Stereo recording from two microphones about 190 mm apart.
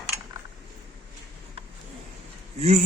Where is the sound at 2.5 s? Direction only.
35° right (ahead or behind).